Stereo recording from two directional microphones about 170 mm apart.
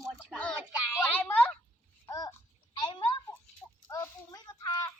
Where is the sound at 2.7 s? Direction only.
30° left (ahead or behind).